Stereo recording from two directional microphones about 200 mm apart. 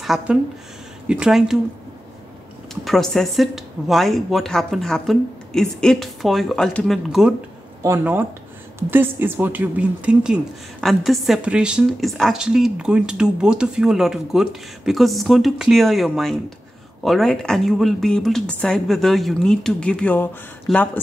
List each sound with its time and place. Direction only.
0.0 s a woman's voice: centre (ahead or behind)
2.7 s a woman's voice: centre (ahead or behind)